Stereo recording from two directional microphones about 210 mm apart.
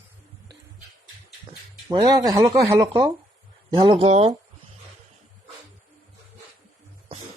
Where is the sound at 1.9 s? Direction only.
20° right (ahead or behind).